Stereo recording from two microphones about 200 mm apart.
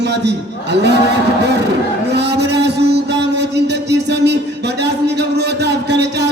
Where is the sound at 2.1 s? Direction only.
55° right (ahead or behind).